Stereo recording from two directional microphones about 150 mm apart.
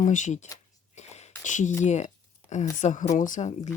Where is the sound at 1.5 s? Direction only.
55° left (ahead or behind).